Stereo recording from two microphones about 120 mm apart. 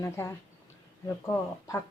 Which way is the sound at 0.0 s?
25° left (ahead or behind).